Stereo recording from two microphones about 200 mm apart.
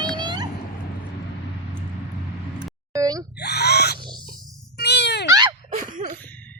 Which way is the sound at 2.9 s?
20° right (ahead or behind).